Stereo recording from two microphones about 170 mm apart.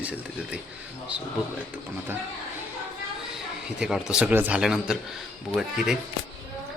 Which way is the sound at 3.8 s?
5° right (ahead or behind).